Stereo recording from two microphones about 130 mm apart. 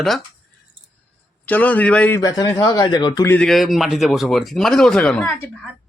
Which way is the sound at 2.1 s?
25° left (ahead or behind).